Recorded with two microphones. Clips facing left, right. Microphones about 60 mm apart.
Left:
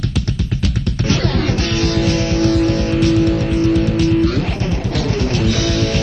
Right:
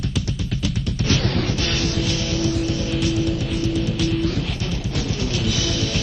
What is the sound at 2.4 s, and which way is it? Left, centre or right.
Music, left.